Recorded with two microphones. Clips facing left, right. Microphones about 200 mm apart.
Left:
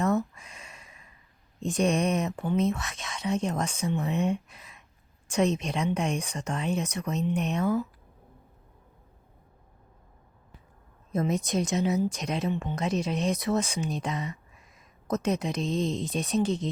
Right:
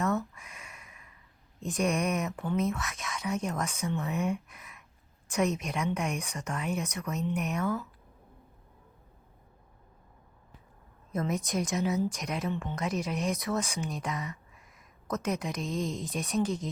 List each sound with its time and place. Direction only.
0.0 s a sound: 30° left (ahead or behind)
1.6 s speech: 30° left (ahead or behind)
11.1 s speech: 25° left (ahead or behind)